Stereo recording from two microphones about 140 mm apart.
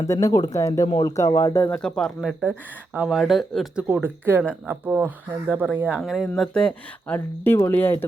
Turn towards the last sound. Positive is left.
turn(degrees=15)  # may be behind; listen again after turning